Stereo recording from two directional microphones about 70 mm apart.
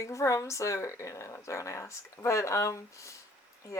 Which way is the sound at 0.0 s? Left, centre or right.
Left.